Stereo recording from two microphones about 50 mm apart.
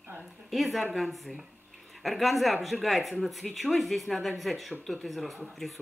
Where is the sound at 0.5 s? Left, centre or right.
Centre.